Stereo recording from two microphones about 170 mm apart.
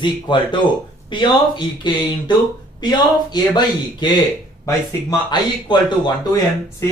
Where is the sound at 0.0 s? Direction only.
30° left (ahead or behind).